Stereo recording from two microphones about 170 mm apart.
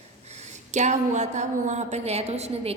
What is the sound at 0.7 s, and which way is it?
A woman's voice, 45° right (ahead or behind).